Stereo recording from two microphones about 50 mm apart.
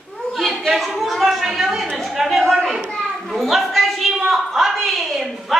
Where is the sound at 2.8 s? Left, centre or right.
Centre.